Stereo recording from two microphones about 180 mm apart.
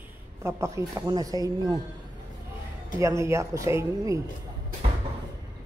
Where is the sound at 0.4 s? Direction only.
15° right (ahead or behind).